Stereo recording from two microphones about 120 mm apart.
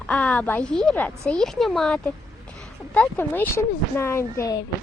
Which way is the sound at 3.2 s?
20° left (ahead or behind).